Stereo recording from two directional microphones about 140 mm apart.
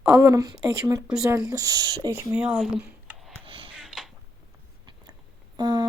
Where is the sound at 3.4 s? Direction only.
40° right (ahead or behind).